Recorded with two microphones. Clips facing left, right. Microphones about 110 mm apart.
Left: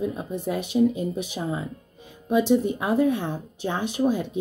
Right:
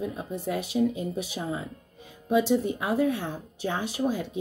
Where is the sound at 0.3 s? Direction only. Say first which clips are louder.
Left 3 dB; 20° left (ahead or behind).